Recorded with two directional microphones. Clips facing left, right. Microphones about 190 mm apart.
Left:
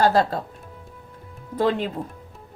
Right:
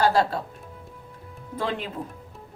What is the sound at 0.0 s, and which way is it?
Speech, 45° left (ahead or behind).